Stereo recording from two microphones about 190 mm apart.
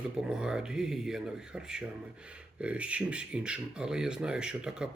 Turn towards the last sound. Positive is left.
turn(degrees=-5)  # may be behind; listen again after turning